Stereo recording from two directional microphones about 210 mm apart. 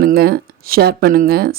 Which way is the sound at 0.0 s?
45° right (ahead or behind).